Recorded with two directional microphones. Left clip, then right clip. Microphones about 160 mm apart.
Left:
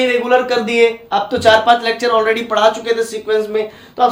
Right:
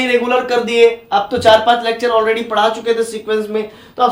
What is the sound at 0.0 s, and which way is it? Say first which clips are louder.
A man's voice: left 1 dB; 35° right (ahead or behind).